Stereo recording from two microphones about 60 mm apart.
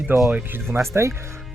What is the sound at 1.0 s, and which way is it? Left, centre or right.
Speech, right.